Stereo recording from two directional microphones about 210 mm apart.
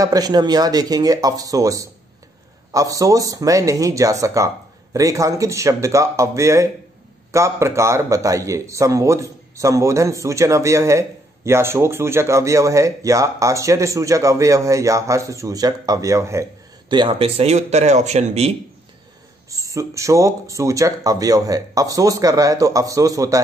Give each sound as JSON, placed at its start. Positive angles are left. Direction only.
{"t": 0.0, "sound": "a man's voice", "side_deg": -20}
{"t": 19.5, "sound": "a man's voice", "side_deg": -15}